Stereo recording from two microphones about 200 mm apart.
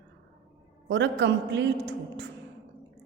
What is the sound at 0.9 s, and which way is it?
A woman's voice, 60° right (ahead or behind).